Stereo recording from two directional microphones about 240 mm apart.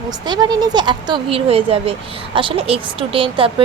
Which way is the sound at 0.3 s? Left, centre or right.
Centre.